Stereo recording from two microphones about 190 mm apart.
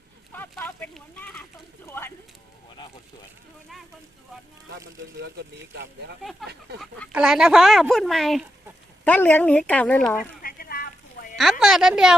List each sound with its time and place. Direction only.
0.3 s a sound: 10° left (ahead or behind)
1.9 s clip-clop: 10° left (ahead or behind)
5.1 s speech: 65° right (ahead or behind)
7.1 s a woman's voice: 5° right (ahead or behind)
10.4 s a sound: 50° left (ahead or behind)
11.6 s a woman's voice: centre (ahead or behind)